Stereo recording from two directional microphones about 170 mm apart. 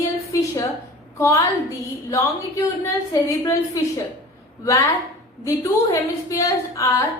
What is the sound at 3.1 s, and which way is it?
Speech, 20° left (ahead or behind).